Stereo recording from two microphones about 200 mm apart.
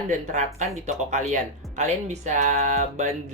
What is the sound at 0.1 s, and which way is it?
Speech, 35° right (ahead or behind).